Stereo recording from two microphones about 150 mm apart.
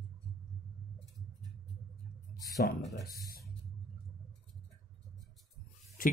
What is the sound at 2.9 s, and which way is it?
Speech, 80° left.